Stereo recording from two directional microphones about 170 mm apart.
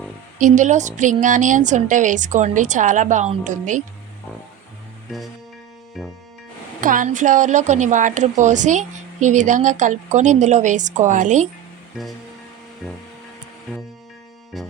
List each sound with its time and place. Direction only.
0.3 s a woman's voice: 50° right (ahead or behind)
5.1 s music: centre (ahead or behind)
6.8 s a woman's voice: 50° right (ahead or behind)
12.8 s music: centre (ahead or behind)
14.5 s music: centre (ahead or behind)